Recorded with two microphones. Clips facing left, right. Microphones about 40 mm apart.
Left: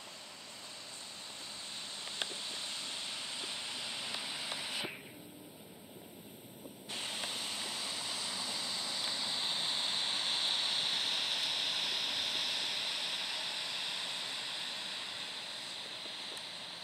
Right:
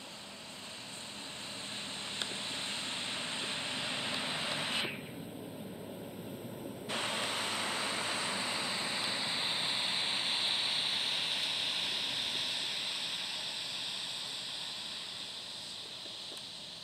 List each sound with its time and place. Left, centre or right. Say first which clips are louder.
2.1 s vehicle: right 1 dB; right
6.9 s vehicle: right 5 dB; right; by 14.0 s centre